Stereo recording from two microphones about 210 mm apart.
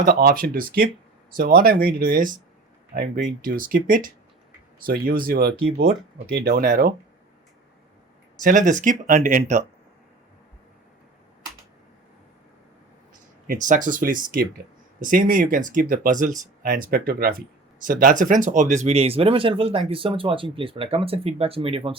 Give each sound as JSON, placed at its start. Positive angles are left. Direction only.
{"t": 0.0, "sound": "speech", "side_deg": -45}
{"t": 2.9, "sound": "speech", "side_deg": -55}
{"t": 3.4, "sound": "speech", "side_deg": -40}
{"t": 8.4, "sound": "speech", "side_deg": -40}
{"t": 13.5, "sound": "speech", "side_deg": -40}